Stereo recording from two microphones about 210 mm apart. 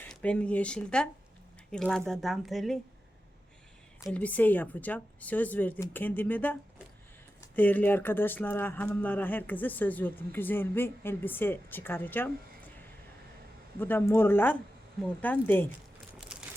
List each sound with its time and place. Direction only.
0.0 s speech: 5° left (ahead or behind)
4.0 s speech: 5° left (ahead or behind)
13.7 s speech: 10° left (ahead or behind)
16.3 s a sound: centre (ahead or behind)